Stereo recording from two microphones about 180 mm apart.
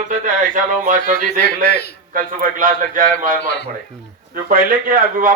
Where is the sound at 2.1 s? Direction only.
50° right (ahead or behind).